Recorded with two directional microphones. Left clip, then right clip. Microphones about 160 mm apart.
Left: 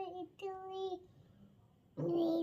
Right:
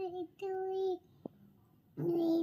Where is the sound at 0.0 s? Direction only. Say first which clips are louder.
Right 4 dB; 15° left (ahead or behind).